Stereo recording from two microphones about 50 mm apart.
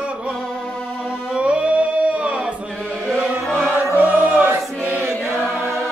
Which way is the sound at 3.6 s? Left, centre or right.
Right.